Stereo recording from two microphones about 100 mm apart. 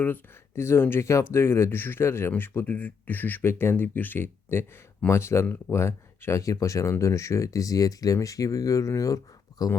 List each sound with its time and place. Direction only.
0.0 s speech: 20° left (ahead or behind)